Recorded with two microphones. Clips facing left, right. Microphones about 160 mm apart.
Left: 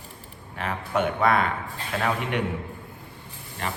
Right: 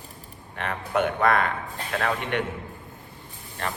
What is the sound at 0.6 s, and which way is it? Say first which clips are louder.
Speech: right 1 dB; centre (ahead or behind).